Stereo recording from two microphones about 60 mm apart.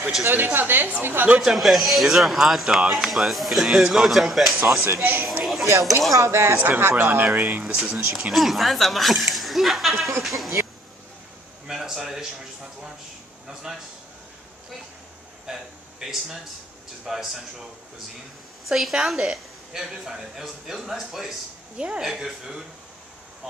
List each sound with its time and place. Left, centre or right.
0.2 s a woman's voice: right
1.4 s a woman's voice: centre
4.8 s a woman's voice: right
5.4 s a sound: centre
5.7 s speech: right
6.1 s speech: right
7.3 s speech: right
7.6 s a woman's voice: centre
11.6 s a sound: centre
13.5 s speech: centre
15.4 s a man's voice: centre
18.7 s a woman's voice: centre
21.7 s speech: centre
22.0 s speech: centre